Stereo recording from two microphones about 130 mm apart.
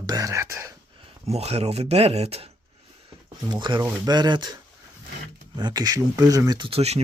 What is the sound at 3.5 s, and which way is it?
Speech, 35° right (ahead or behind).